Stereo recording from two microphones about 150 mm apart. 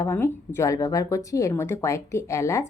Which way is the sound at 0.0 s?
15° left (ahead or behind).